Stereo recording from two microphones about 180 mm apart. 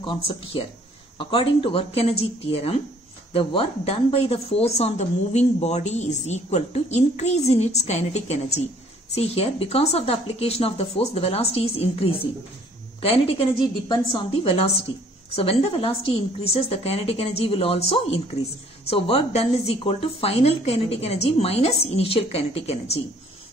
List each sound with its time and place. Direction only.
0.0 s speech: 25° left (ahead or behind)